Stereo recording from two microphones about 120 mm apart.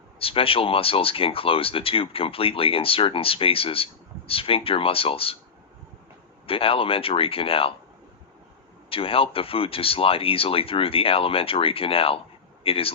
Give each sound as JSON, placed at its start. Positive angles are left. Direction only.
{"t": 0.2, "sound": "speech", "side_deg": 50}
{"t": 6.5, "sound": "speech", "side_deg": 50}
{"t": 8.9, "sound": "speech", "side_deg": 50}